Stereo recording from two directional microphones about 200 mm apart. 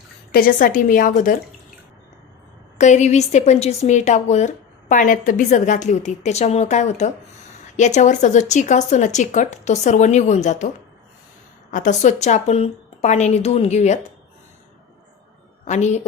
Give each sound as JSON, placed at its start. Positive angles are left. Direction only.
{"t": 0.3, "sound": "a woman's voice", "side_deg": 45}
{"t": 2.7, "sound": "a woman's voice", "side_deg": 35}
{"t": 11.7, "sound": "a woman's voice", "side_deg": 40}
{"t": 15.6, "sound": "a woman's voice", "side_deg": 35}